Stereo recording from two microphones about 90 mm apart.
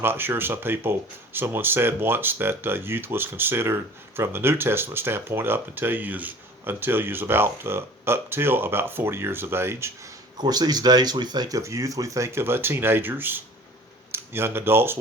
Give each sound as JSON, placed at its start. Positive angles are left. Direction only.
{"t": 0.0, "sound": "speech", "side_deg": -25}
{"t": 10.3, "sound": "speech", "side_deg": -50}